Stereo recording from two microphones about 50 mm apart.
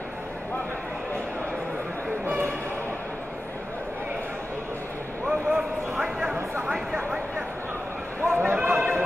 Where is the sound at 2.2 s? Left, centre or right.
Right.